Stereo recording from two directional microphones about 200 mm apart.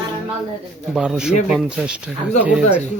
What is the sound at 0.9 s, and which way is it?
Speech, 5° right (ahead or behind).